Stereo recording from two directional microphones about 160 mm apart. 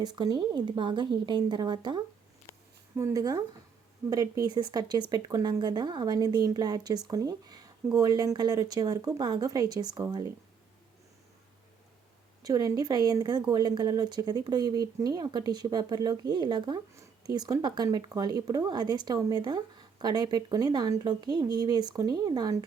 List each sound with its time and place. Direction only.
0.0 s speech: 25° right (ahead or behind)
12.4 s speech: 25° right (ahead or behind)